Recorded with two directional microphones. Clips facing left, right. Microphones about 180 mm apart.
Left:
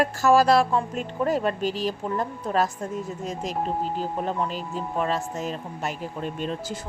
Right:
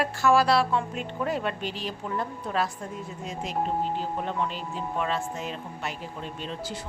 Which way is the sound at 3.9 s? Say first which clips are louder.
Left 2 dB; 40° left (ahead or behind).